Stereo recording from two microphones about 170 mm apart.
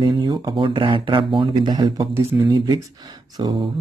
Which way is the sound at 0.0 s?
25° right (ahead or behind).